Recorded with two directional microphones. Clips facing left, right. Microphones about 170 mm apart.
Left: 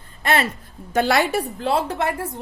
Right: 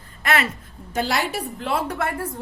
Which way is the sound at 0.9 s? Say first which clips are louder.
Left 5 dB; 60° left (ahead or behind).